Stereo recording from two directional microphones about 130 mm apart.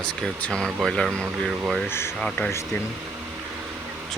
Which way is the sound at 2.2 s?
5° left (ahead or behind).